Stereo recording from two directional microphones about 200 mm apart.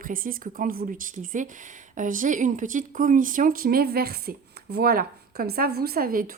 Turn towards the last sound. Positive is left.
turn(degrees=-45)  # may be behind; listen again after turning